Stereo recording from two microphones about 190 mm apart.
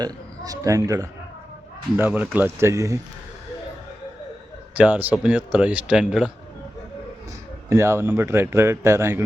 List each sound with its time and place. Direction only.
0.0 s a man's voice: 20° right (ahead or behind)
4.8 s a man's voice: 10° right (ahead or behind)
7.7 s a man's voice: 15° right (ahead or behind)